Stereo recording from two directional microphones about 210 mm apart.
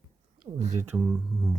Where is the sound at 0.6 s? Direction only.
35° right (ahead or behind).